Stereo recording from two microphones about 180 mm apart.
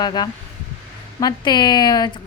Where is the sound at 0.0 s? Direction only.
25° left (ahead or behind).